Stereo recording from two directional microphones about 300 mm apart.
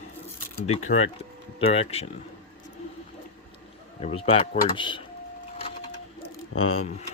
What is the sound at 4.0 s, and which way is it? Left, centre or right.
Speech, centre.